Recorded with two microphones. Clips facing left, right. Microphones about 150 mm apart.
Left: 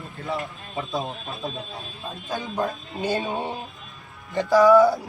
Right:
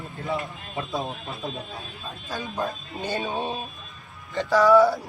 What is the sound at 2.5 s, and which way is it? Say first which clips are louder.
Speech: left 3 dB; 20° left (ahead or behind).